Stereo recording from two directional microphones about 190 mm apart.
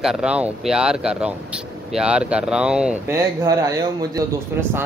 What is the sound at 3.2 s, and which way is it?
Speech, 15° right (ahead or behind).